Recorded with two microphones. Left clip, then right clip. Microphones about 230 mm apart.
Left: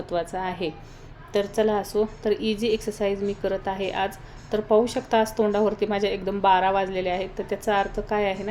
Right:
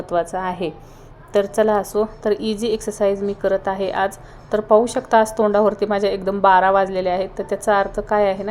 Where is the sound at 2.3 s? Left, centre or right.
Left.